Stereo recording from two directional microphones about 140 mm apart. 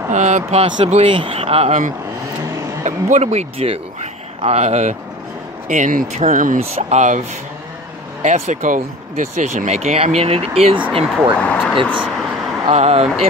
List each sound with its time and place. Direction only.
0.1 s speech: 55° right (ahead or behind)
2.8 s speech: 55° right (ahead or behind)
5.7 s speech: 65° right (ahead or behind)
6.7 s speech: 55° right (ahead or behind); by 11.3 s 40° right (ahead or behind)
11.3 s speech: 10° left (ahead or behind)
12.7 s speech: 50° right (ahead or behind)